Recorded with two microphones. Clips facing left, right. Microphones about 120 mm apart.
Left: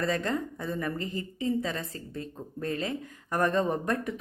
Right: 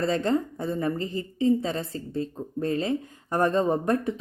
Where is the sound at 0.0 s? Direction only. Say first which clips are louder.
Right 5 dB; 30° right (ahead or behind).